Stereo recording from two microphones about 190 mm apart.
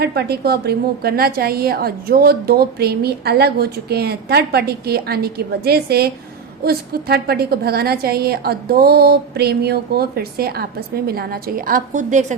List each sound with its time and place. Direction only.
0.0 s a woman's voice: 60° right (ahead or behind)